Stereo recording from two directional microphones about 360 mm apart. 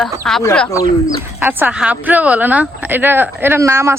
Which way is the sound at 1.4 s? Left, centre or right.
Centre.